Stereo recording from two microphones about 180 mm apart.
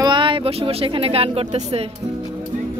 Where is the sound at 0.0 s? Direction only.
25° right (ahead or behind).